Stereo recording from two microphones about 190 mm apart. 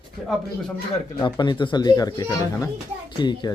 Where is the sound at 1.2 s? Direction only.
25° left (ahead or behind).